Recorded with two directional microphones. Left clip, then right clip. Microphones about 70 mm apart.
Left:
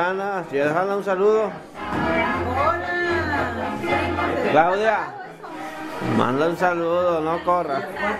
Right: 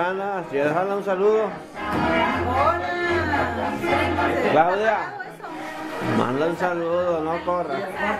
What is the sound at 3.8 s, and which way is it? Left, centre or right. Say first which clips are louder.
Music: right 1 dB; right.